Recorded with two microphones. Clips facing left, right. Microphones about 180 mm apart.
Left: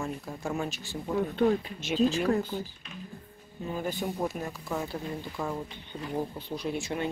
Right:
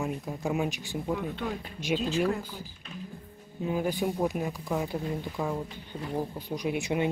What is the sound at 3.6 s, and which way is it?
Speech, 10° right (ahead or behind).